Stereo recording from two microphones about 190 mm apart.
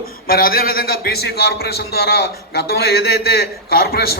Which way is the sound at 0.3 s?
50° left (ahead or behind).